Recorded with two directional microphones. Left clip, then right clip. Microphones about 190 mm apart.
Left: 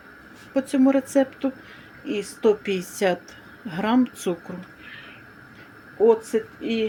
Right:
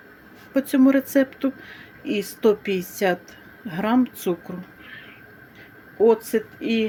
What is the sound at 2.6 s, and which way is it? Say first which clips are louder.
Speech: even; 10° right (ahead or behind).